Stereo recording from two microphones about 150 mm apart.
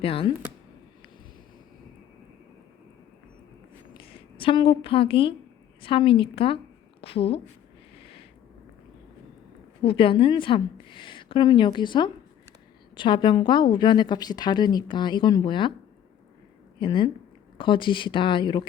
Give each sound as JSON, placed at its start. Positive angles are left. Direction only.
{"t": 0.0, "sound": "a woman's voice", "side_deg": 40}
{"t": 3.9, "sound": "a woman's voice", "side_deg": 35}
{"t": 9.8, "sound": "a woman's voice", "side_deg": 35}
{"t": 16.8, "sound": "a woman's voice", "side_deg": 35}